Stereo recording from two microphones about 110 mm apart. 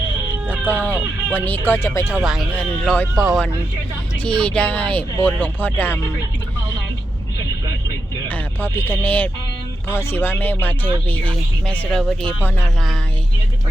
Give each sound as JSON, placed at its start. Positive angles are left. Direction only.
{"t": 0.5, "sound": "speech", "side_deg": 15}
{"t": 2.2, "sound": "speech", "side_deg": -5}
{"t": 2.6, "sound": "speech", "side_deg": 10}
{"t": 8.6, "sound": "speech", "side_deg": 20}
{"t": 11.9, "sound": "speech", "side_deg": 0}